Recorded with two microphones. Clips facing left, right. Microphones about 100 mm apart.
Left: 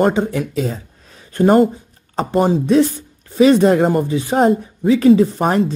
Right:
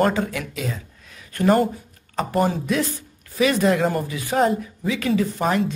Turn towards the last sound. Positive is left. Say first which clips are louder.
# left 11 dB
turn(degrees=35)  # may be behind; listen again after turning